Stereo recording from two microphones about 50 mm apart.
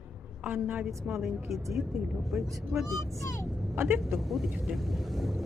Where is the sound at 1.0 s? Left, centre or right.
Centre.